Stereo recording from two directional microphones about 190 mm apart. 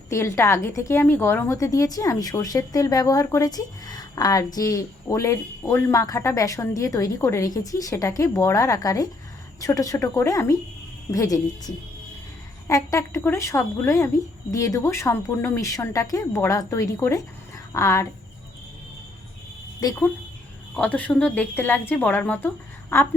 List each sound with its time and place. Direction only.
0.1 s a woman's voice: 15° left (ahead or behind)
19.8 s a woman's voice: 15° left (ahead or behind)